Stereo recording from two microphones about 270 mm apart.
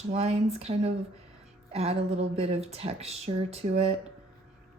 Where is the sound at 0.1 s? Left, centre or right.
Right.